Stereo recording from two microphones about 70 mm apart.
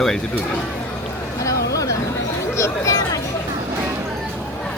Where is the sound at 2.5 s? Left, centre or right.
Left.